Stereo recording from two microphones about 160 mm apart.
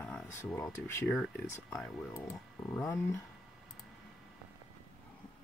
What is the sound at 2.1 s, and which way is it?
Speech, 15° left (ahead or behind).